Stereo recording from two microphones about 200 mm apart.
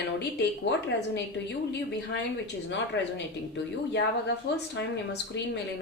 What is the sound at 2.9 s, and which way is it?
A woman's voice, 60° left (ahead or behind).